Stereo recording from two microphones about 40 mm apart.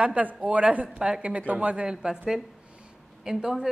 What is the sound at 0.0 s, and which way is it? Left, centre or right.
Speech, right.